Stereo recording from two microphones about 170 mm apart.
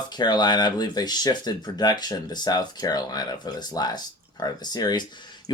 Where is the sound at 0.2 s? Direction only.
25° left (ahead or behind).